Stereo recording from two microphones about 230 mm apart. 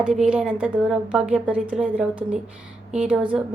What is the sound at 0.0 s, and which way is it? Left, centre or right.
A woman's voice, centre.